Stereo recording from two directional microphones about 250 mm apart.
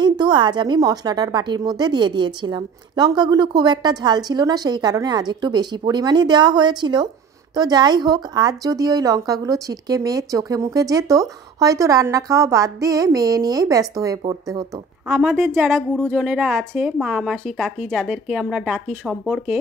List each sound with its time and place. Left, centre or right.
0.0 s a woman's voice: centre
15.0 s a woman's voice: centre